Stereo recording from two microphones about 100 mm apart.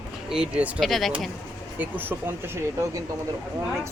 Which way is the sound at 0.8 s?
Centre (ahead or behind).